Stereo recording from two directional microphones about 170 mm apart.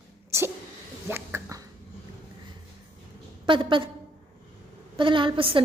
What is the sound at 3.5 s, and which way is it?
Speech, 30° right (ahead or behind).